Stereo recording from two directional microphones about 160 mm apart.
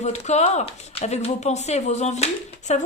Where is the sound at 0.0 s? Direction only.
45° left (ahead or behind).